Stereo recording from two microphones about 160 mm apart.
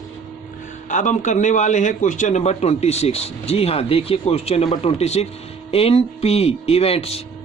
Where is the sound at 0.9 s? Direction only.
50° left (ahead or behind).